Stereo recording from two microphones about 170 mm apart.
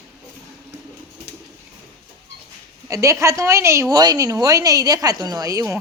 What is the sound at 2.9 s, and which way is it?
A woman's voice, 15° right (ahead or behind).